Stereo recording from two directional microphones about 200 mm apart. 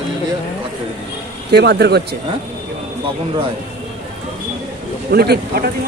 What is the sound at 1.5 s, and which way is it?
Speech, 55° right (ahead or behind).